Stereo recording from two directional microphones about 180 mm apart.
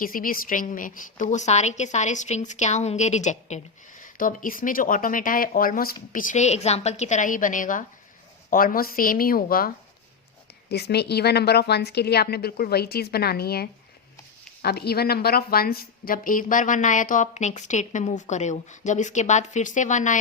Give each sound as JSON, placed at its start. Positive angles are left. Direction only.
{"t": 0.0, "sound": "a woman's voice", "side_deg": 50}
{"t": 10.7, "sound": "a woman's voice", "side_deg": 65}